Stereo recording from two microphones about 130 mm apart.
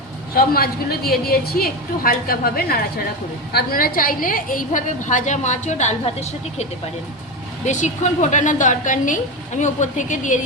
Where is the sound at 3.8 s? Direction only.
90° left.